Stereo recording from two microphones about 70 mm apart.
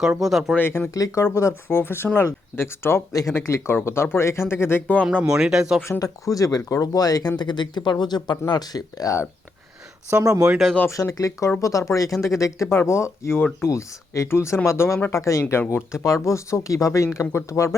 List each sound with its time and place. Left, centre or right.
0.2 s speech: centre
0.9 s speech: left
1.3 s speech: left
1.6 s speech: left
3.1 s speech: left
3.3 s speech: left
5.2 s speech: centre
6.0 s speech: left
7.3 s speech: left
10.1 s speech: right
10.8 s speech: left